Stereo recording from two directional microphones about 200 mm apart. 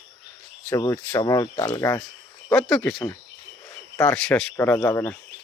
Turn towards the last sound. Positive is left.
turn(degrees=10)  # may be behind; listen again after turning